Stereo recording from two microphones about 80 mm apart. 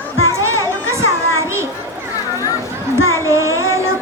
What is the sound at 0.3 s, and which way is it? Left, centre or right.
Children playing, right.